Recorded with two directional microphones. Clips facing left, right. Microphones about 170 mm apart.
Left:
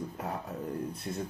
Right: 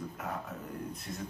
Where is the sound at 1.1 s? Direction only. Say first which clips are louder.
Left 6 dB; 30° left (ahead or behind).